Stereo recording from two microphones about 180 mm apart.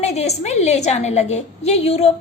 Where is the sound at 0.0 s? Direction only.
35° left (ahead or behind).